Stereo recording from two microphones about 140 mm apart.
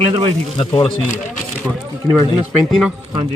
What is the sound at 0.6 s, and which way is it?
Speech, 30° left (ahead or behind).